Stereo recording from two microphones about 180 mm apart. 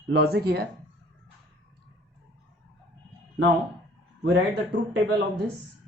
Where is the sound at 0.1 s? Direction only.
60° right (ahead or behind).